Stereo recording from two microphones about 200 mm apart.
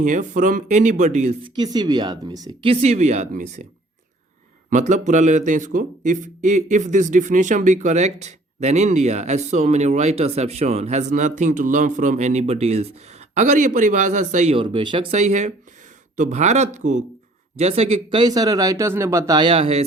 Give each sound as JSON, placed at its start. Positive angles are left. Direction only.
{"t": 0.0, "sound": "speech", "side_deg": -40}
{"t": 1.5, "sound": "speech", "side_deg": -20}
{"t": 4.7, "sound": "speech", "side_deg": -35}
{"t": 14.5, "sound": "speech", "side_deg": -25}